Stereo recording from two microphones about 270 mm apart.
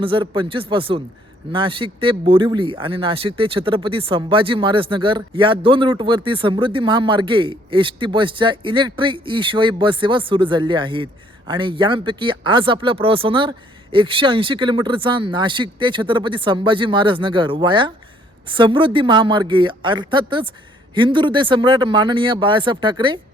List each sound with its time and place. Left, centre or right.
0.0 s speech: centre